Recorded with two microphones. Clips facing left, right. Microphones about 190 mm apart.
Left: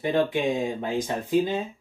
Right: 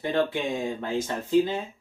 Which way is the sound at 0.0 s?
15° left (ahead or behind).